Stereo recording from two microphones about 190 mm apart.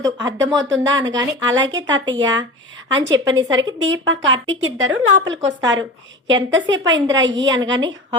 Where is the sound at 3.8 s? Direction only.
85° right.